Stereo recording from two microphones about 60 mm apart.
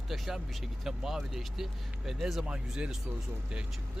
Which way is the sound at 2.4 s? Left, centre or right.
Centre.